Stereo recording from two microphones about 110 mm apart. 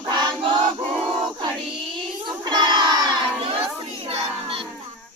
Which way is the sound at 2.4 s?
40° right (ahead or behind).